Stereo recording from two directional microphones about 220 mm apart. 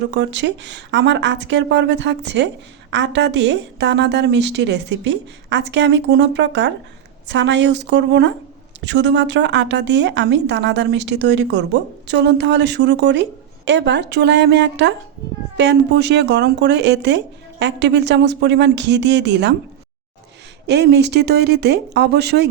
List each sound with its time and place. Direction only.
0.1 s a woman's voice: 50° right (ahead or behind)
20.7 s a woman's voice: 50° right (ahead or behind)